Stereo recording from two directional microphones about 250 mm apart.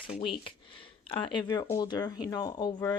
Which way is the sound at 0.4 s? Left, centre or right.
Left.